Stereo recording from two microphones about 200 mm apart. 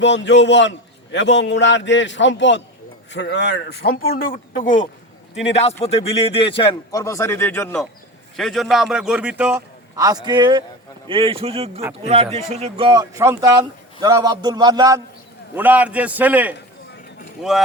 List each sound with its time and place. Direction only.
0.0 s a man's voice: 65° left (ahead or behind); by 17.6 s centre (ahead or behind)